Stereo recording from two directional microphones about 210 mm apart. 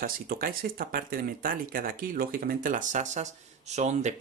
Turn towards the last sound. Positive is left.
turn(degrees=-35)  # may be behind; listen again after turning